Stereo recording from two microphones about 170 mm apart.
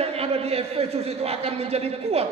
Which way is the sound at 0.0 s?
35° right (ahead or behind).